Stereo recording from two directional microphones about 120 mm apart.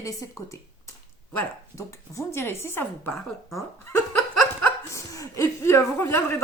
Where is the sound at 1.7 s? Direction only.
25° left (ahead or behind).